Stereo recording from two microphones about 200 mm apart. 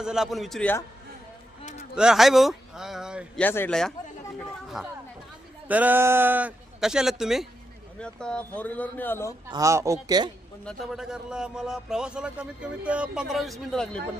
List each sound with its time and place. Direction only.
0.0 s a man's voice: centre (ahead or behind)
2.0 s a man's voice: centre (ahead or behind)
3.4 s a man's voice: 10° left (ahead or behind)
9.5 s speech: 15° right (ahead or behind)
10.6 s a man's voice: centre (ahead or behind)